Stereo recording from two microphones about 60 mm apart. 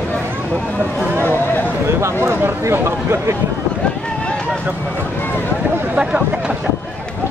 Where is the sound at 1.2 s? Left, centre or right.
Left.